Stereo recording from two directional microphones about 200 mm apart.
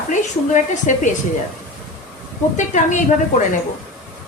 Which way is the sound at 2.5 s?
40° left (ahead or behind).